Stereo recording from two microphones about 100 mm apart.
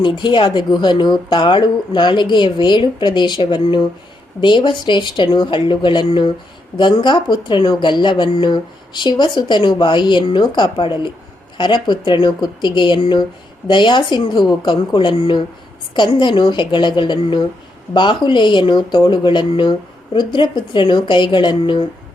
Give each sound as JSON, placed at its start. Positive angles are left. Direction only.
{"t": 0.0, "sound": "speech", "side_deg": 50}